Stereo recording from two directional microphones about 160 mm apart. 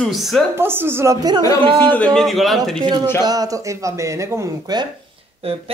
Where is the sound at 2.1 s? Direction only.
Centre (ahead or behind).